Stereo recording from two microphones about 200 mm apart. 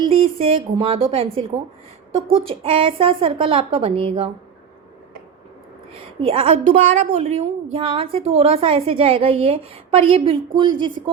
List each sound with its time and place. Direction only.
0.1 s a woman's voice: 30° right (ahead or behind)
6.1 s a woman's voice: 25° right (ahead or behind)